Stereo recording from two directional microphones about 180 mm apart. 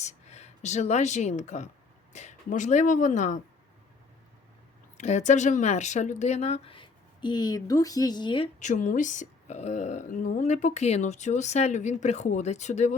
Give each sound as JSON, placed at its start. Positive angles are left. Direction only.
{"t": 0.0, "sound": "speech", "side_deg": 35}
{"t": 4.9, "sound": "speech", "side_deg": 40}
{"t": 8.5, "sound": "speech", "side_deg": 45}